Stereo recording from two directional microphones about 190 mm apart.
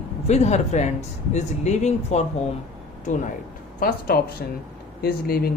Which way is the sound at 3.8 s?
50° left (ahead or behind).